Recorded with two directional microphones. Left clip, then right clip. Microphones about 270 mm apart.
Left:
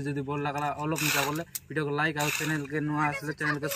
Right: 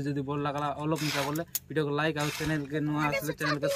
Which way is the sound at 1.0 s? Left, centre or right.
Left.